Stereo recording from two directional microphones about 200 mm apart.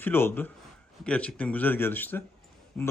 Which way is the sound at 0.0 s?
10° left (ahead or behind).